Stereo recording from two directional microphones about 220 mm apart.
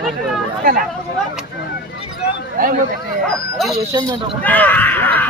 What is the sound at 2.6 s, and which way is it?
Speech, 40° right (ahead or behind).